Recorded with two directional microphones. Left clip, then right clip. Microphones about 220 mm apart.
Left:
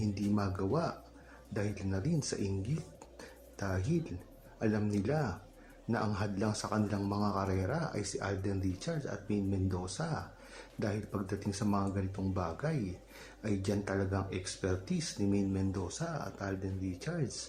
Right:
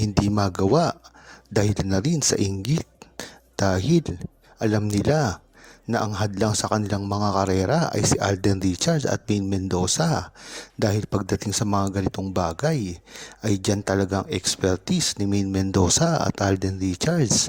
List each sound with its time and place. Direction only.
0.0 s speech: 45° right (ahead or behind)